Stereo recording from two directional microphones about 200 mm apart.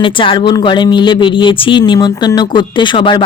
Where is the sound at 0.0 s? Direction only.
25° left (ahead or behind).